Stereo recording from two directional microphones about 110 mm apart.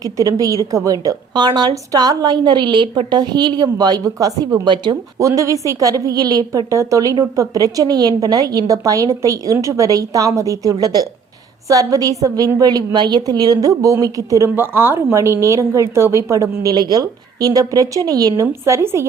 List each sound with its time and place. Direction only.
0.0 s a woman's voice: 30° right (ahead or behind)
5.2 s a woman's voice: 30° right (ahead or behind)
18.6 s speech: 25° right (ahead or behind)